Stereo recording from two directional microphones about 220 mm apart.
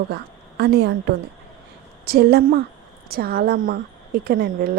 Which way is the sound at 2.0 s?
45° right (ahead or behind).